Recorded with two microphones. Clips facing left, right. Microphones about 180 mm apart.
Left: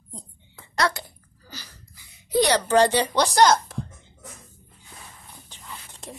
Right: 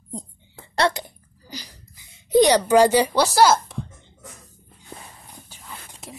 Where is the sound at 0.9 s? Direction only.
15° right (ahead or behind); by 3.8 s centre (ahead or behind).